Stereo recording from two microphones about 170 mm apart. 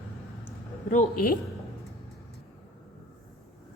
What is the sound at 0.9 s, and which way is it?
Speech, 55° left (ahead or behind).